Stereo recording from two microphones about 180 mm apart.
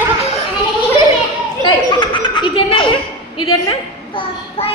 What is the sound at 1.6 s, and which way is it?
A child's voice, 25° left (ahead or behind).